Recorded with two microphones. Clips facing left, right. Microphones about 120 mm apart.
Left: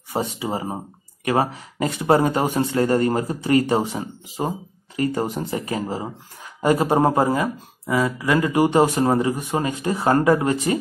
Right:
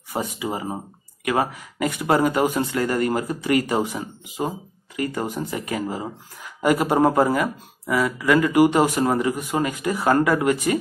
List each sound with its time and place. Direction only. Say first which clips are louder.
0.1 s speech: left 2 dB; 30° left (ahead or behind)